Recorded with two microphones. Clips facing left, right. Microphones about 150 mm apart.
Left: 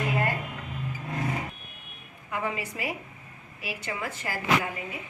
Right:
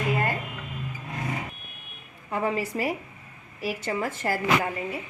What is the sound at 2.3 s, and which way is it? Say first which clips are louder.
A woman's voice: right 5 dB; 35° right (ahead or behind).